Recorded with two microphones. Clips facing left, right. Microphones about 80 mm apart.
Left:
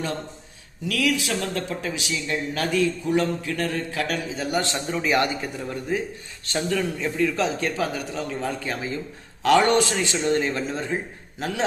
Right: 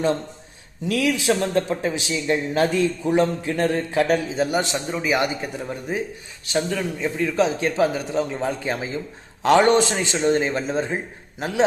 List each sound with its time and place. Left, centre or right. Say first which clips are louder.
0.9 s speech: right 4 dB; right
4.9 s speech: left 2 dB; centre